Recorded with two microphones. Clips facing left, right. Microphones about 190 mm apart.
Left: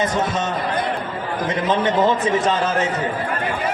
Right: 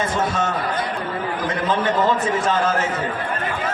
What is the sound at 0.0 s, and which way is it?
Speech, 20° left (ahead or behind).